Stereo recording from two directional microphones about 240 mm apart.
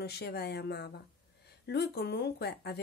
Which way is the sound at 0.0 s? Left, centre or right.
Left.